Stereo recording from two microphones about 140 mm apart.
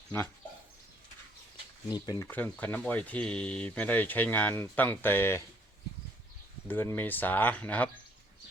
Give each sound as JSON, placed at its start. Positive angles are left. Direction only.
{"t": 1.9, "sound": "speech", "side_deg": 25}
{"t": 2.3, "sound": "speech", "side_deg": 10}
{"t": 6.7, "sound": "speech", "side_deg": 15}